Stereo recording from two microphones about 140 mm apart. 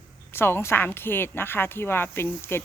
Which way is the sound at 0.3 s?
15° left (ahead or behind).